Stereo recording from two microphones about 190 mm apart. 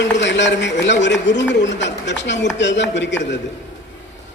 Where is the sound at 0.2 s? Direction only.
70° left (ahead or behind).